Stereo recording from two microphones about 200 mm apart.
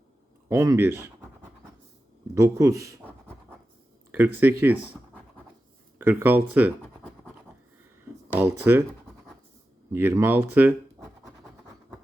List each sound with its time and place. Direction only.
0.4 s speech: 15° right (ahead or behind)
4.4 s speech: 10° right (ahead or behind)
6.0 s speech: 10° right (ahead or behind)
8.3 s speech: 10° right (ahead or behind)
9.9 s speech: 10° right (ahead or behind)